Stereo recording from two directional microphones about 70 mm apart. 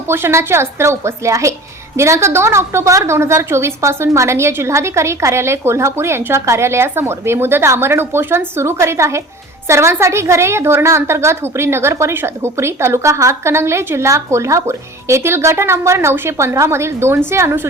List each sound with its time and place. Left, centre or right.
0.1 s a woman's voice: right